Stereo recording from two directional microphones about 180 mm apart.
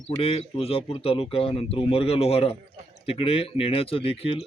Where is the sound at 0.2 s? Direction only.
35° left (ahead or behind).